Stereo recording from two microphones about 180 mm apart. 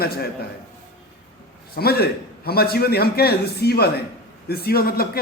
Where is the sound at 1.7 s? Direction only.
60° left (ahead or behind).